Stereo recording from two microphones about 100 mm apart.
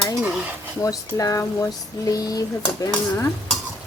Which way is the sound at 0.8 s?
30° left (ahead or behind).